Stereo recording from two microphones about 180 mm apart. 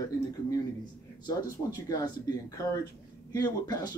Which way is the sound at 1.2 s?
20° left (ahead or behind).